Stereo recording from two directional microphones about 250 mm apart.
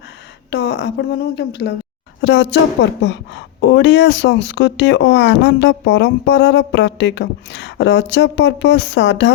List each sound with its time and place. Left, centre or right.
0.5 s speech: left